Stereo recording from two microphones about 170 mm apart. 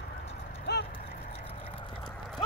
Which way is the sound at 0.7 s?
80° left.